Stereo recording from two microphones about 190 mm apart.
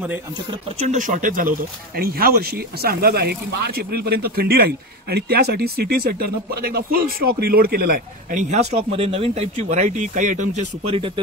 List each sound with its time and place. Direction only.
0.5 s speech: 35° right (ahead or behind)